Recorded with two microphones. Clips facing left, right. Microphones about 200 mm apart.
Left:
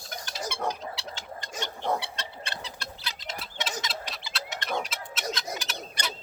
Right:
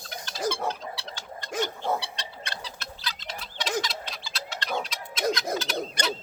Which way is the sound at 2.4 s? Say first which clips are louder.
Even; 20° left (ahead or behind).